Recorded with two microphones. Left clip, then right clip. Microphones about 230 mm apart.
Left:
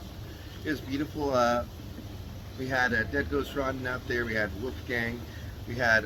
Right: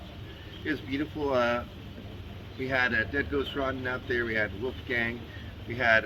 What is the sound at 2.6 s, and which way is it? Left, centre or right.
Speech, left.